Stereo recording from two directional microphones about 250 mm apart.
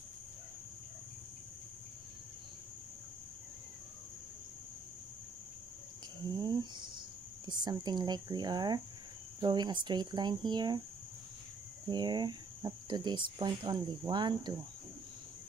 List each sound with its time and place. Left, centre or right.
6.3 s cricket: centre
7.4 s speech: centre
11.9 s speech: centre